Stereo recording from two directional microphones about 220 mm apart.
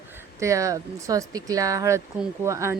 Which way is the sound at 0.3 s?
15° right (ahead or behind).